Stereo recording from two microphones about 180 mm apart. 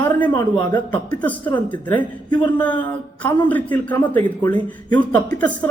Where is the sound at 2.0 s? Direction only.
25° left (ahead or behind).